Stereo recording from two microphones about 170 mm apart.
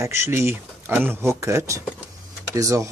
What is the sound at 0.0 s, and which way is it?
Speech, 15° right (ahead or behind).